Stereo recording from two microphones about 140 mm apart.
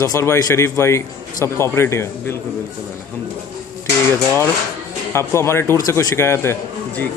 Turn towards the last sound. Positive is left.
turn(degrees=15)  # may be behind; listen again after turning